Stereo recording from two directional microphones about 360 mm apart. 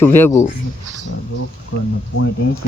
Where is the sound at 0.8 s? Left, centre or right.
Right.